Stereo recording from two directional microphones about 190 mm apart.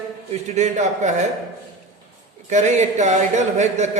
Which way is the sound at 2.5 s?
40° right (ahead or behind).